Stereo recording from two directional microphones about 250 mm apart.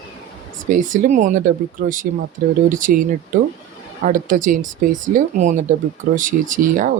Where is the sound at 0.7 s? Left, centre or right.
Right.